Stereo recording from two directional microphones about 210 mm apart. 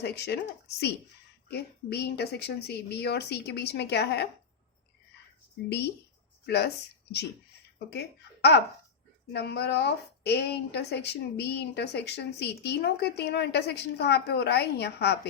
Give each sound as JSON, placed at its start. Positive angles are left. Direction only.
{"t": 0.0, "sound": "a woman's voice", "side_deg": 50}
{"t": 1.5, "sound": "a woman's voice", "side_deg": 50}
{"t": 5.6, "sound": "a woman's voice", "side_deg": 55}
{"t": 7.9, "sound": "a woman's voice", "side_deg": 55}